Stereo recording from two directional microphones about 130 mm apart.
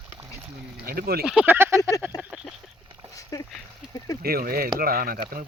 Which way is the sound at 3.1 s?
25° left (ahead or behind).